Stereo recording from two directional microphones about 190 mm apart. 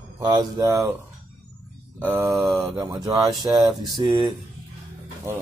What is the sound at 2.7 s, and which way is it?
Mantra, 20° right (ahead or behind).